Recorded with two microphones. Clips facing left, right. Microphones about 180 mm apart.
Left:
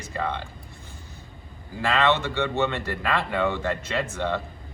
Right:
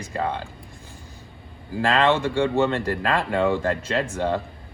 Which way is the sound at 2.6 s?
40° right (ahead or behind).